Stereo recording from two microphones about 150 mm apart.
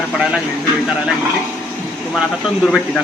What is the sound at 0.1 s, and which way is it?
Speech, centre (ahead or behind).